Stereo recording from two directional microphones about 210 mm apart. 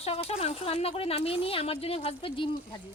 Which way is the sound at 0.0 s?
30° left (ahead or behind).